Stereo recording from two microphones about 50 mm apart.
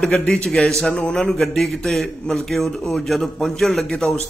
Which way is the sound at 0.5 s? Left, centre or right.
Centre.